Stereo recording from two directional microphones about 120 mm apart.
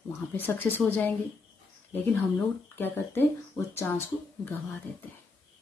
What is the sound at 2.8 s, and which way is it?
Speech, 15° left (ahead or behind).